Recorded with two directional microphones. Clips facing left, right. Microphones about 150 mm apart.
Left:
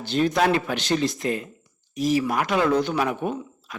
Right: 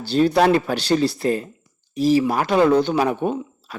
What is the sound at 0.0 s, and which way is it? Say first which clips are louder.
Speech: right 5 dB; 35° right (ahead or behind).